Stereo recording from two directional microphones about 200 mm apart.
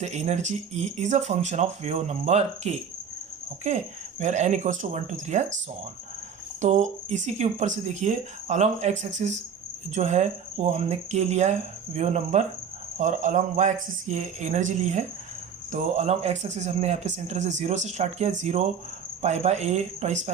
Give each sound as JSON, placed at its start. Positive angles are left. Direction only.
{"t": 0.0, "sound": "speech", "side_deg": -35}
{"t": 4.2, "sound": "speech", "side_deg": -35}
{"t": 6.6, "sound": "speech", "side_deg": -35}